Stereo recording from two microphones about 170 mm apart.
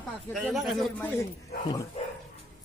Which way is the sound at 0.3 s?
Centre (ahead or behind).